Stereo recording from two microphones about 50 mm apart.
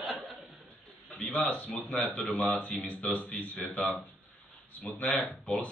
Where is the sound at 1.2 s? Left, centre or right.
Left.